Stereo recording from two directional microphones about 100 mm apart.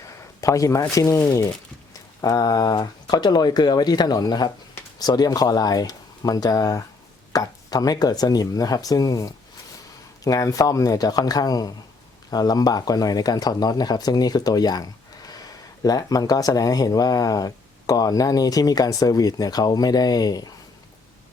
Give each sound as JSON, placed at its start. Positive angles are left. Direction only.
{"t": 0.4, "sound": "speech", "side_deg": 35}